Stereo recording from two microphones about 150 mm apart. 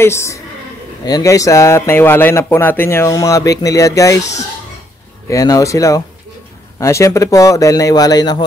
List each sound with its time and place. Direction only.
0.0 s a woman's voice: 15° left (ahead or behind)
5.3 s speech: 20° left (ahead or behind)